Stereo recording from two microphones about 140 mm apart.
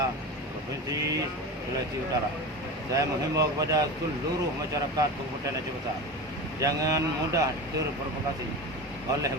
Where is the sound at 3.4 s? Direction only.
25° right (ahead or behind).